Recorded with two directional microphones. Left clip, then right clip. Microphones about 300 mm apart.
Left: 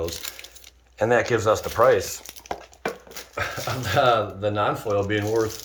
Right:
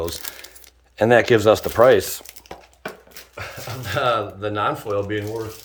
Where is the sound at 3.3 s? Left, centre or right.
Centre.